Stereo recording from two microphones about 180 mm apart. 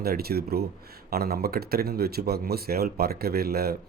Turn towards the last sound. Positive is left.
turn(degrees=-60)  # may be behind; listen again after turning